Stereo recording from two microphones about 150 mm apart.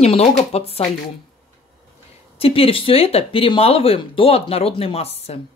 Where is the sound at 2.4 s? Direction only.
40° left (ahead or behind).